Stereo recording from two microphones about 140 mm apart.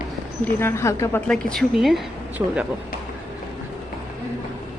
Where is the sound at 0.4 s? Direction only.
20° left (ahead or behind).